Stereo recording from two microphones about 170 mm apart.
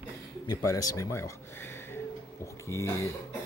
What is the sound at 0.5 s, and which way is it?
Speech, 20° left (ahead or behind).